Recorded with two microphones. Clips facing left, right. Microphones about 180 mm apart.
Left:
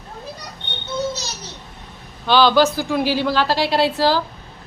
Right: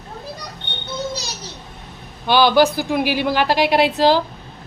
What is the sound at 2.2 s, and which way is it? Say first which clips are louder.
A woman's voice: right 1 dB; 15° right (ahead or behind).